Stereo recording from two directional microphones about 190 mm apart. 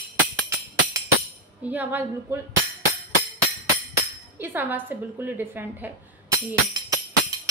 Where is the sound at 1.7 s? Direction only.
10° right (ahead or behind).